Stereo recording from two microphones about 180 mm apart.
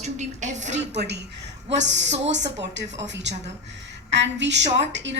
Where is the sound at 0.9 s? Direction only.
70° right (ahead or behind).